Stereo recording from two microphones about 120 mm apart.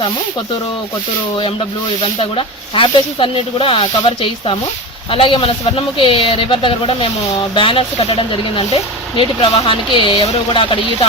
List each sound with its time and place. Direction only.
2.0 s speech: 50° left (ahead or behind)